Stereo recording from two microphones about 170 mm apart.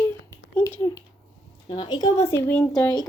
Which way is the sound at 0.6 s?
15° left (ahead or behind).